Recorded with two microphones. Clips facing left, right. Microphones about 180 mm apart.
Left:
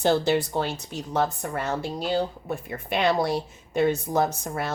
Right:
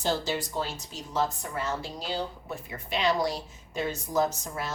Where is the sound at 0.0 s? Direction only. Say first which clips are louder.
Left 8 dB; 60° left (ahead or behind).